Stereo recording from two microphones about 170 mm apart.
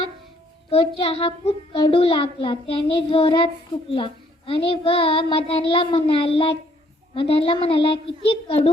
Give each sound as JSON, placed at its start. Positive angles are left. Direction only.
{"t": 0.7, "sound": "a child's voice", "side_deg": 35}